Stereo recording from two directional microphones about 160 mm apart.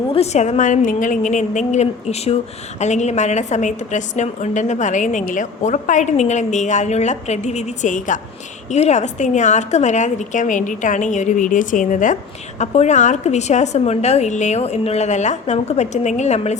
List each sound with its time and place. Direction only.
0.1 s a woman's voice: 40° left (ahead or behind)